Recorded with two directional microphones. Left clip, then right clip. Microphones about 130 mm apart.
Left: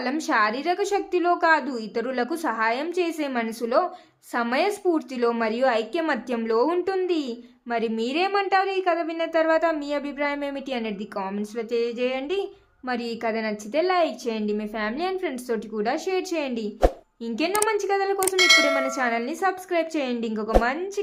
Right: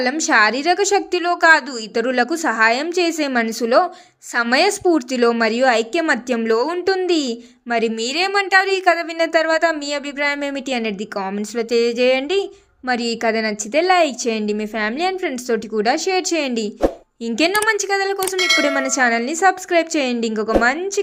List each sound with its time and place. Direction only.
0.0 s a woman's voice: 20° right (ahead or behind)
11.5 s a woman's voice: 35° right (ahead or behind)
18.3 s a sound: centre (ahead or behind)
18.8 s a woman's voice: 30° right (ahead or behind)